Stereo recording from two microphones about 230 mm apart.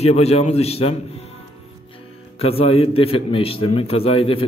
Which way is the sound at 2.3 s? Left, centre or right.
Left.